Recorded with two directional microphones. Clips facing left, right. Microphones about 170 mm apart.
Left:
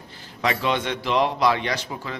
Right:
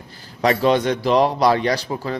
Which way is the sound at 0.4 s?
40° right (ahead or behind).